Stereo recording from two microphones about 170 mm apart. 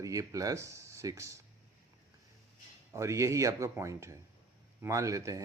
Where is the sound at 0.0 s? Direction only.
20° right (ahead or behind).